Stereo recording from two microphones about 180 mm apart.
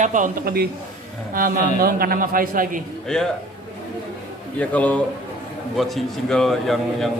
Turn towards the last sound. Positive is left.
turn(degrees=0)  # may be behind; listen again after turning